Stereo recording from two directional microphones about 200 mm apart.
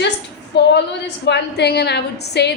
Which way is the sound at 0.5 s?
60° left (ahead or behind).